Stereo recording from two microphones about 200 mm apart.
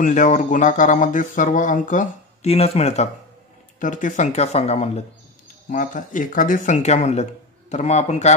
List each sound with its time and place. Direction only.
0.0 s speech: 40° left (ahead or behind)